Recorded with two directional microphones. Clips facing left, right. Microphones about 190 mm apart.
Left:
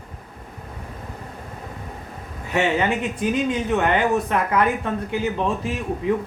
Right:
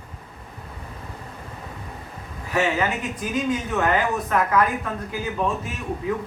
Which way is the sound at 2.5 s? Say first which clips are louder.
Left 2 dB; 30° left (ahead or behind).